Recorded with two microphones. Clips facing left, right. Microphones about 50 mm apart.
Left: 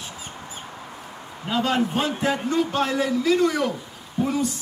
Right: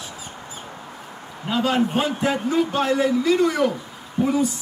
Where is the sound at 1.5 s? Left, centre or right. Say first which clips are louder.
Right 2 dB; centre.